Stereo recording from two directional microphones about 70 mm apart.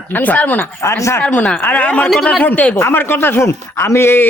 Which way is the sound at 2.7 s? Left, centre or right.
Left.